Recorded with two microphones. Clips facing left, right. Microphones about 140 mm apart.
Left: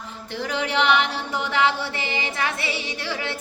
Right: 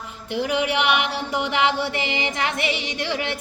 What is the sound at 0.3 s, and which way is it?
Speech, 15° right (ahead or behind).